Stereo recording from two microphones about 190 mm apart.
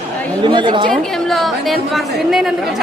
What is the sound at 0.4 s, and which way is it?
Speech, 25° right (ahead or behind).